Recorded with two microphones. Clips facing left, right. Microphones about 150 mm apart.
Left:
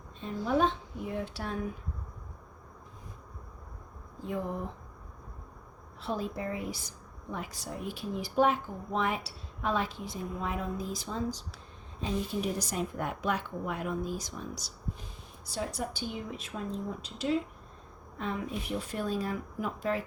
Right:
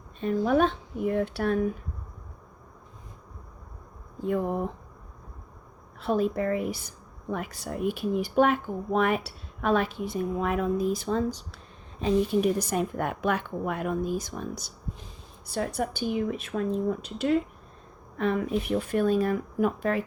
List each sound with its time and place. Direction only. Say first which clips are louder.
0.2 s a woman's voice: right 5 dB; 65° right (ahead or behind)
6.0 s a woman's voice: right 9 dB; 60° right (ahead or behind)